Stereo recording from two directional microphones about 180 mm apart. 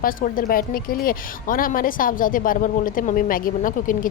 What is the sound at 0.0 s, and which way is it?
A woman's voice, 50° left (ahead or behind).